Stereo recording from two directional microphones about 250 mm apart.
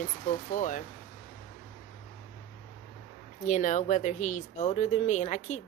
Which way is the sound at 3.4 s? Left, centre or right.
Left.